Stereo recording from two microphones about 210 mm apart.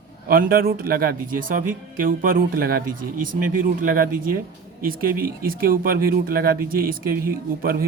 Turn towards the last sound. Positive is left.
turn(degrees=-45)  # may be behind; listen again after turning